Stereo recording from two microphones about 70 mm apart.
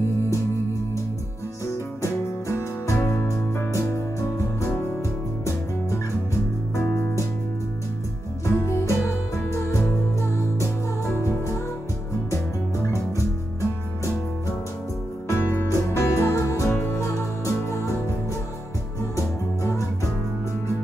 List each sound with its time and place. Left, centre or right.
2.0 s music: left
8.5 s music: left
15.2 s music: left
19.1 s music: left